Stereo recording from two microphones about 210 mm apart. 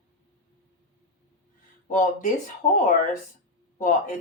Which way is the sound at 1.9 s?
40° left (ahead or behind).